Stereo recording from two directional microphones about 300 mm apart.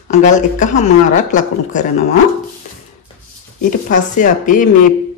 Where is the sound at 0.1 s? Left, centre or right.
Left.